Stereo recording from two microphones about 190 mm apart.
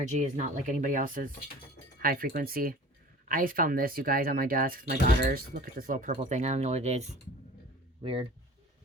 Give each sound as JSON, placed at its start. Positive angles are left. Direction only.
{"t": 0.0, "sound": "speech", "side_deg": -40}
{"t": 8.0, "sound": "speech", "side_deg": -30}